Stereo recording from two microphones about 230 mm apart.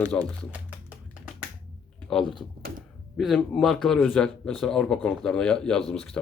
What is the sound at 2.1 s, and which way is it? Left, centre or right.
Speech, centre.